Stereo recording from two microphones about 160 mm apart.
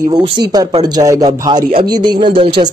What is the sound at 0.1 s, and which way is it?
Speech, 25° right (ahead or behind).